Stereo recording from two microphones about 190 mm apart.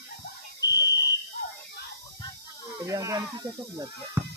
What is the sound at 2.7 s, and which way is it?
Speech, 15° right (ahead or behind).